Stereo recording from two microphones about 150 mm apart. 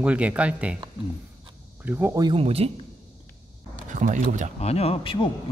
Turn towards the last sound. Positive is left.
turn(degrees=35)  # may be behind; listen again after turning